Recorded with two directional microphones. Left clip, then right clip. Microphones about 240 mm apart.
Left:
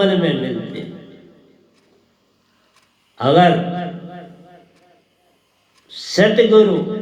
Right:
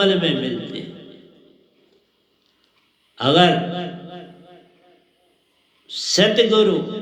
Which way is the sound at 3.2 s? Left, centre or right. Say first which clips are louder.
Left 3 dB; right.